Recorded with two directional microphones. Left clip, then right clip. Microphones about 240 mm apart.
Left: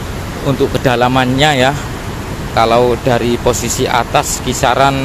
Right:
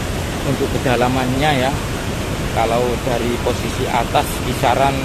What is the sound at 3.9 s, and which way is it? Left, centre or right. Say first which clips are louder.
Speech: left 3 dB; left.